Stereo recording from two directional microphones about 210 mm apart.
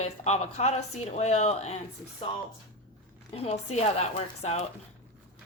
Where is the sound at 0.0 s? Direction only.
30° left (ahead or behind).